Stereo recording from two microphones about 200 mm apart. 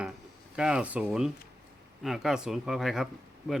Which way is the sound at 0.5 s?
5° right (ahead or behind).